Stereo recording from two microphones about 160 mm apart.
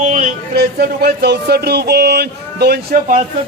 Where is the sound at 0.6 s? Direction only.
75° right (ahead or behind).